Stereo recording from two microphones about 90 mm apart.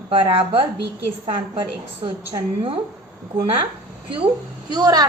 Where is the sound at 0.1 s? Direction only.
80° right.